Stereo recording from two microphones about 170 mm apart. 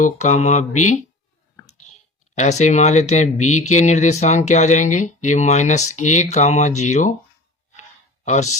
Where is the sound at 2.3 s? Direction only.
45° left (ahead or behind).